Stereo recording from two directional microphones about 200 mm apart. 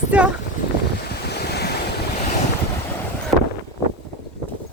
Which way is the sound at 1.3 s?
55° left (ahead or behind).